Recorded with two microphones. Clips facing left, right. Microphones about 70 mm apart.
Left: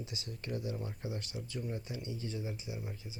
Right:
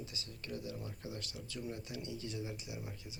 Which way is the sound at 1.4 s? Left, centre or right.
Left.